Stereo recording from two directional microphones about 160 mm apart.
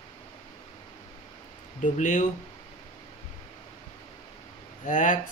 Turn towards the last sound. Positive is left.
turn(degrees=50)  # may be behind; listen again after turning